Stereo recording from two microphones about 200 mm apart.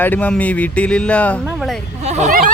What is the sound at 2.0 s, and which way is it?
Speech, 35° right (ahead or behind).